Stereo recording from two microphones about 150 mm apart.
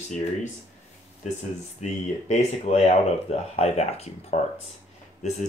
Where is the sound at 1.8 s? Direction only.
50° left (ahead or behind).